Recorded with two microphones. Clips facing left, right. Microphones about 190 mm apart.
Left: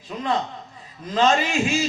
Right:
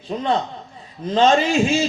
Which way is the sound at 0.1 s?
35° right (ahead or behind).